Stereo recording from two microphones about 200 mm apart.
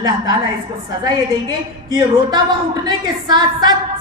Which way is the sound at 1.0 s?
20° right (ahead or behind).